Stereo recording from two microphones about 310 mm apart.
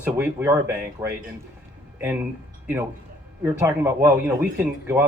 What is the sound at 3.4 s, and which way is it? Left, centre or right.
Speech, centre.